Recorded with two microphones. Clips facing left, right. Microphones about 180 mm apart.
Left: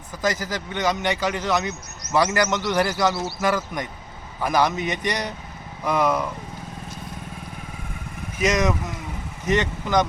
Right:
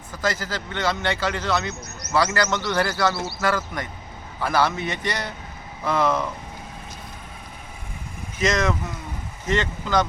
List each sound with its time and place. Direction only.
0.2 s a man's voice: 15° left (ahead or behind)
8.4 s a man's voice: 15° left (ahead or behind)